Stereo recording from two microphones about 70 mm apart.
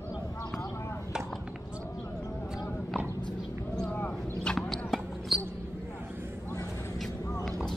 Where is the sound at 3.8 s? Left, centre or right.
Left.